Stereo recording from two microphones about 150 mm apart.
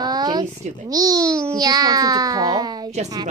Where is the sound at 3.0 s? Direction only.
45° right (ahead or behind).